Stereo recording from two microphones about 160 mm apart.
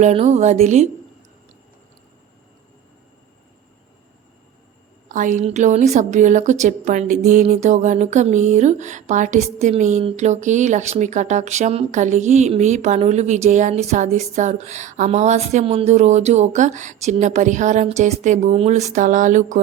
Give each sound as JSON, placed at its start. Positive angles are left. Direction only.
{"t": 0.0, "sound": "speech", "side_deg": -45}
{"t": 5.0, "sound": "speech", "side_deg": -55}